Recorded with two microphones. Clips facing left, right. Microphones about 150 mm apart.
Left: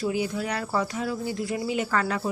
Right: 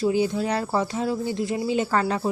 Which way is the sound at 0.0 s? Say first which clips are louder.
Right 5 dB; 30° right (ahead or behind).